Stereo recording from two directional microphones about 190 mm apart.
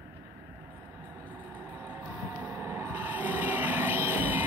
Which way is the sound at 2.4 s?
10° right (ahead or behind).